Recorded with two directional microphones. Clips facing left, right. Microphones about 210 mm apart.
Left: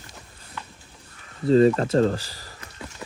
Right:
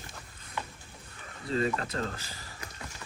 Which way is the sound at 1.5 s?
35° left (ahead or behind).